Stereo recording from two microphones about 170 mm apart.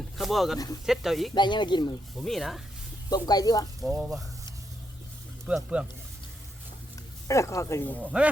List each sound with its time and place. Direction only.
0.2 s speech: centre (ahead or behind)
1.3 s speech: 25° left (ahead or behind)
2.1 s speech: centre (ahead or behind)
3.1 s speech: 25° left (ahead or behind)
3.8 s speech: centre (ahead or behind)
5.5 s speech: 5° right (ahead or behind)
7.3 s speech: 15° left (ahead or behind)
8.0 s speech: 5° right (ahead or behind)